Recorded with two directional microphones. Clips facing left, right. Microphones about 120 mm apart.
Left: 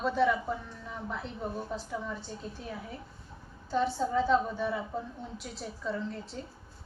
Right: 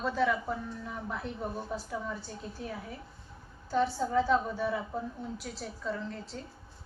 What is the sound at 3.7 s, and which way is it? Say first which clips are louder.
A woman's voice: even; centre (ahead or behind).